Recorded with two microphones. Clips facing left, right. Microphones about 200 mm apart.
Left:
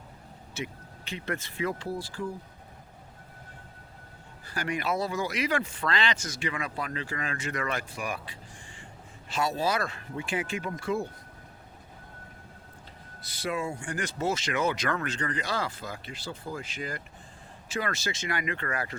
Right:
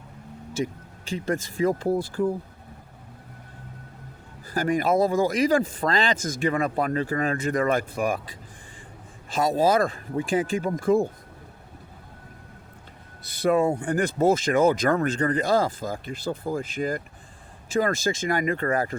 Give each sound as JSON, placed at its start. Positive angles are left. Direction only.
{"t": 1.1, "sound": "speech", "side_deg": -45}
{"t": 4.5, "sound": "speech", "side_deg": -45}
{"t": 9.3, "sound": "speech", "side_deg": -45}
{"t": 13.4, "sound": "speech", "side_deg": -55}